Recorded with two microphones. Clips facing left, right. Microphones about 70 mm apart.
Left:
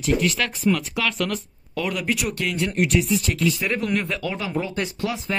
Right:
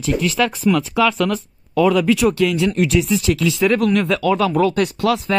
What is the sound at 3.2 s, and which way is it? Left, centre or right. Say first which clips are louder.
Speech: right 6 dB; right.